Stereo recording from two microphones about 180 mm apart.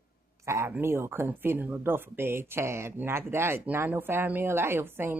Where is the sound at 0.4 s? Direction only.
15° right (ahead or behind).